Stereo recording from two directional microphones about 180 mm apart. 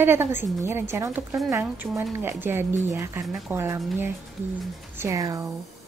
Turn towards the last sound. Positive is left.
turn(degrees=-20)  # may be behind; listen again after turning